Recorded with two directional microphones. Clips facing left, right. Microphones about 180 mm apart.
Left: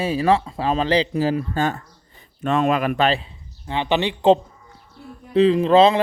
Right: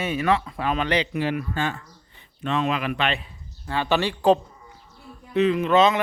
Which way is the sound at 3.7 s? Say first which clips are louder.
Left 2 dB; 20° left (ahead or behind).